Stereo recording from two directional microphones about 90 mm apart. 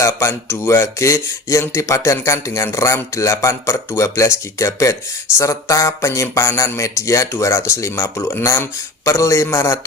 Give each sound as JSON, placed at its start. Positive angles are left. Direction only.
{"t": 0.0, "sound": "speech", "side_deg": 30}